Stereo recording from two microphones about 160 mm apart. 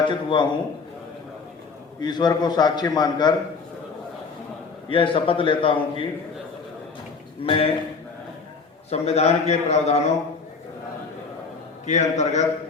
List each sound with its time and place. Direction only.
0.1 s a man's voice: 30° left (ahead or behind)
2.0 s a man's voice: 25° left (ahead or behind)
4.9 s a man's voice: 30° left (ahead or behind)
7.4 s a man's voice: 35° left (ahead or behind)
8.9 s a man's voice: 40° left (ahead or behind)
11.9 s a man's voice: 45° left (ahead or behind)